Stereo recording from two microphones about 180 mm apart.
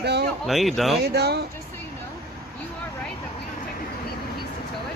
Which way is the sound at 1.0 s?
65° right (ahead or behind).